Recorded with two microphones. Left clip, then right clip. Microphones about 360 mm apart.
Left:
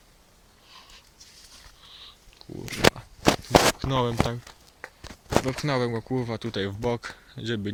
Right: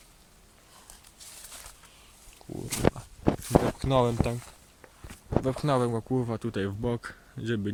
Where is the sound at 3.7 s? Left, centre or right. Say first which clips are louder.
Right 1 dB; centre.